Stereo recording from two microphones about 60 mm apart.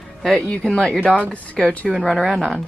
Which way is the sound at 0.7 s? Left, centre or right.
Centre.